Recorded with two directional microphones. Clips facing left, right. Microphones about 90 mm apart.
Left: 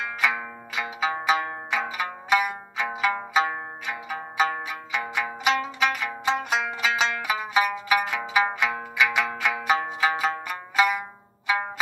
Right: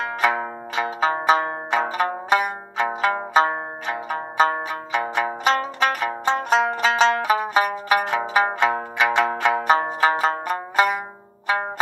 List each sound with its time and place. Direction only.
0.2 s zither: 35° right (ahead or behind)